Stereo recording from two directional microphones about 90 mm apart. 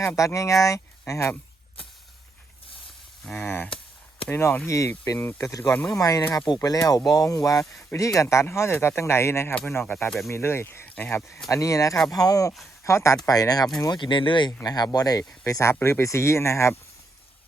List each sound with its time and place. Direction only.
0.2 s speech: 35° left (ahead or behind)
3.4 s speech: 20° left (ahead or behind); by 5.7 s 35° left (ahead or behind)
5.7 s speech: 15° left (ahead or behind)
6.0 s speech: 40° left (ahead or behind)
10.1 s speech: centre (ahead or behind)
10.3 s speech: 30° left (ahead or behind)
11.4 s speech: 35° left (ahead or behind)
13.8 s speech: 60° left (ahead or behind)
14.6 s speech: 45° left (ahead or behind)